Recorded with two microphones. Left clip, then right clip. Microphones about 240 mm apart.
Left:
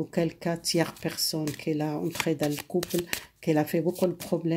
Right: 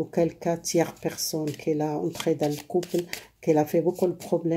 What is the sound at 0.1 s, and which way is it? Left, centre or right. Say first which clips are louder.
Speech: right 5 dB; left.